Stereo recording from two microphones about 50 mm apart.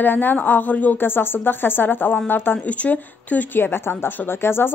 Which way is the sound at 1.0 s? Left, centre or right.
Left.